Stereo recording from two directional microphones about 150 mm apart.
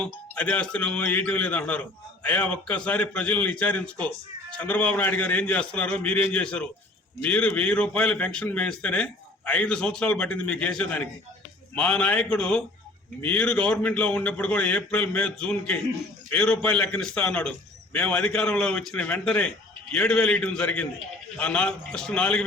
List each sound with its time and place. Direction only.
0.0 s a man's voice: 10° left (ahead or behind)